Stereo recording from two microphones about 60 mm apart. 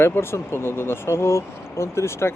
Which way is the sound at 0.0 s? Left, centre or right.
Left.